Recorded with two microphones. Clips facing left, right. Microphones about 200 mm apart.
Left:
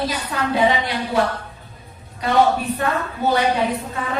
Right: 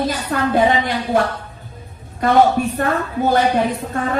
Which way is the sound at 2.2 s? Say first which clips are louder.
Right 3 dB; 50° right (ahead or behind).